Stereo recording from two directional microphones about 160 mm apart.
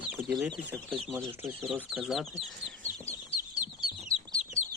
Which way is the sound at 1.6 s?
5° right (ahead or behind).